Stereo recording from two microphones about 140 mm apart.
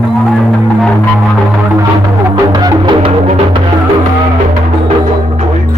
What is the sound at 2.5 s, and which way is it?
Music, 30° right (ahead or behind).